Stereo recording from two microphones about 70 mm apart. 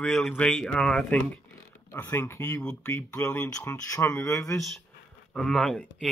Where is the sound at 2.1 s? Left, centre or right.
Left.